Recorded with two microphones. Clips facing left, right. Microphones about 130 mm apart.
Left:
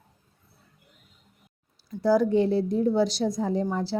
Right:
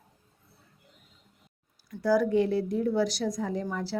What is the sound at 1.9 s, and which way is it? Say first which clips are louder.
A woman's voice: left 3 dB; 25° left (ahead or behind).